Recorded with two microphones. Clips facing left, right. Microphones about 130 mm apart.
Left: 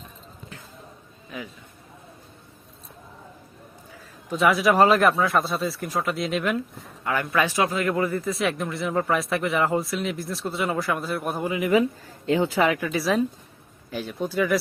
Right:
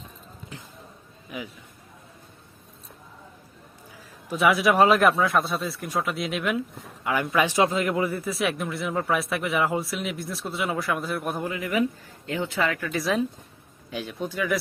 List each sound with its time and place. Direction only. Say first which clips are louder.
1.3 s a man's voice: even; 15° right (ahead or behind)
4.3 s a man's voice: left 1 dB; centre (ahead or behind)
7.0 s a man's voice: even; 15° right (ahead or behind); by 11.5 s centre (ahead or behind)
11.5 s speech: left 7 dB; 20° left (ahead or behind)
13.9 s a man's voice: left 4 dB; centre (ahead or behind)